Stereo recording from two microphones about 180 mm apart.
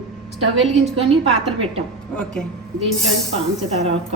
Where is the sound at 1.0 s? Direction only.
35° right (ahead or behind).